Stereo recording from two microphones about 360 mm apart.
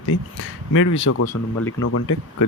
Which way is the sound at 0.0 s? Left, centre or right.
Left.